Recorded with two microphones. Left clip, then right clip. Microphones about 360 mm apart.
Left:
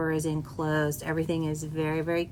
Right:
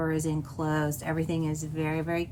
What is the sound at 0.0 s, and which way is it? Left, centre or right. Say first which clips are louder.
A woman's voice: left 1 dB; centre.